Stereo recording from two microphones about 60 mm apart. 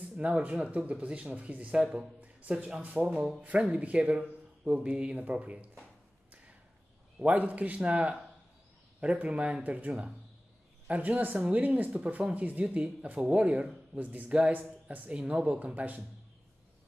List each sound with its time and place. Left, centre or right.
0.2 s speech: right
7.2 s speech: right